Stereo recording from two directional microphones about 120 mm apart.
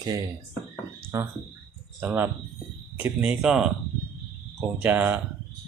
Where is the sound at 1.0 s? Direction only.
25° right (ahead or behind).